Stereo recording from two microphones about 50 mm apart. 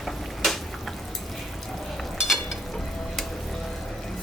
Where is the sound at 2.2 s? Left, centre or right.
Centre.